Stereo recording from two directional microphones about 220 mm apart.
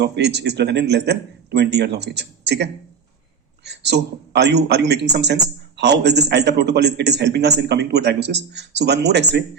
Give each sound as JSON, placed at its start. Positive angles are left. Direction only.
{"t": 0.0, "sound": "a man's voice", "side_deg": -50}